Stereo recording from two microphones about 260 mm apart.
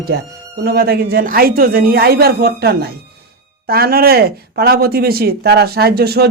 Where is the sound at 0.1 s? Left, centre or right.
Right.